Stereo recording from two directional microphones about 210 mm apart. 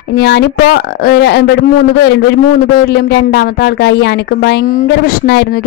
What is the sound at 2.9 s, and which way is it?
Speech, 50° left (ahead or behind).